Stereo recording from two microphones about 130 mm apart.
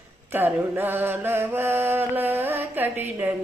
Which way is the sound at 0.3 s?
15° right (ahead or behind).